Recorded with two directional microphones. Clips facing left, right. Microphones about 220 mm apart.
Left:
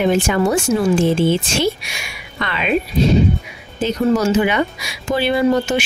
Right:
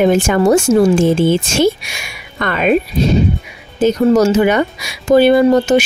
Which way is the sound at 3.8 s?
45° right (ahead or behind).